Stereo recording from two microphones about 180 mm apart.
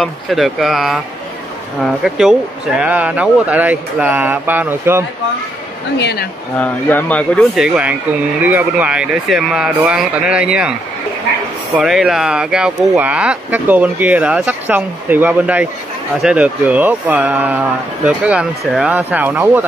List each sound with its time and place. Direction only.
0.0 s speech: centre (ahead or behind)
2.0 s speech: 5° right (ahead or behind)
5.9 s speech: 65° left (ahead or behind)
6.6 s speech: 10° left (ahead or behind)
7.5 s speech: 5° right (ahead or behind)
11.8 s speech: centre (ahead or behind)